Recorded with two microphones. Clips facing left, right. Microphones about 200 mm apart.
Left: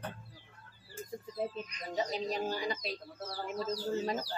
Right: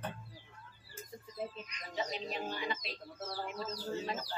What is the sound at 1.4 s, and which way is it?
Speech, 40° left (ahead or behind).